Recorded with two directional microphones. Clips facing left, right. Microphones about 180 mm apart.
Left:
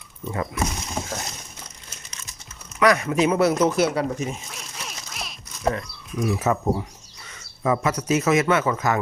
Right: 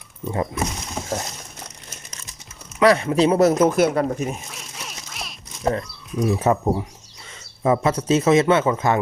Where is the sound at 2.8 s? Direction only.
30° right (ahead or behind); by 4.1 s 50° right (ahead or behind).